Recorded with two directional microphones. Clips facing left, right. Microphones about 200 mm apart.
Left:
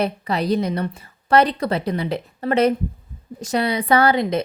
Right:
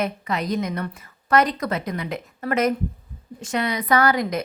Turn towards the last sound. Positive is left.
turn(degrees=25)  # may be behind; listen again after turning